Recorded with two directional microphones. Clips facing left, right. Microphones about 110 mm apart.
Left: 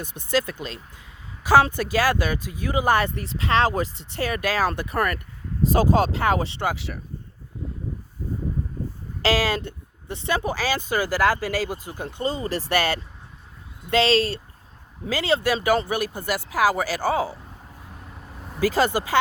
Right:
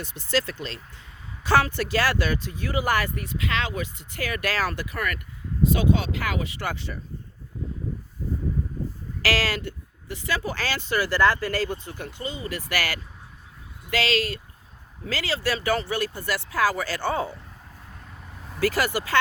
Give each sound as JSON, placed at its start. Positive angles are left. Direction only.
{"t": 0.0, "sound": "speech", "side_deg": 15}
{"t": 4.9, "sound": "speech", "side_deg": 35}
{"t": 6.7, "sound": "speech", "side_deg": 0}
{"t": 9.2, "sound": "speech", "side_deg": 20}
{"t": 12.2, "sound": "speech", "side_deg": 35}
{"t": 18.6, "sound": "speech", "side_deg": 20}